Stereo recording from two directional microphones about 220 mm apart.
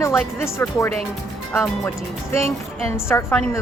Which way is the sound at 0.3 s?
15° left (ahead or behind).